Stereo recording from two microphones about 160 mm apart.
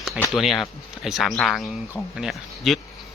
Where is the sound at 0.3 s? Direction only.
Centre (ahead or behind).